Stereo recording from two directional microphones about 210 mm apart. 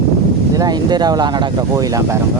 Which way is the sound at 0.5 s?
20° right (ahead or behind).